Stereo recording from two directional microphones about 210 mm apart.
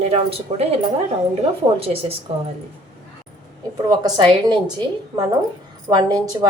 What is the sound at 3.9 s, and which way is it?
Speech, 20° right (ahead or behind).